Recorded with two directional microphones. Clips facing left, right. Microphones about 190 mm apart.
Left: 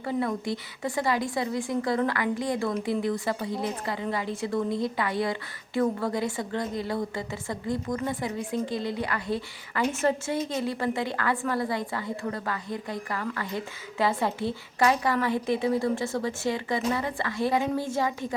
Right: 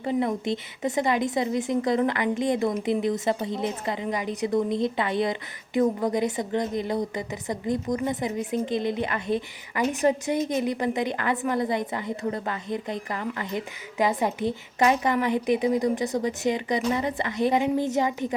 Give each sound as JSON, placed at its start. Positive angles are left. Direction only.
{"t": 0.0, "sound": "a woman's voice", "side_deg": -20}